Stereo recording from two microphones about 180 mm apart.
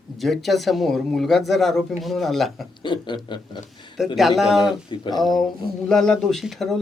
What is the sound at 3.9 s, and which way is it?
Speech, centre (ahead or behind).